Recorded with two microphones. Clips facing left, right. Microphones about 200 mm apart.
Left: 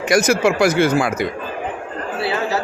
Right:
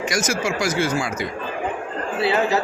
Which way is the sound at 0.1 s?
60° left (ahead or behind).